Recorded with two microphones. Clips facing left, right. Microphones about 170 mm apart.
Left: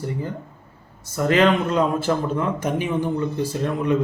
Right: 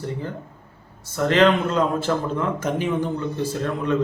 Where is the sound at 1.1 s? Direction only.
10° left (ahead or behind).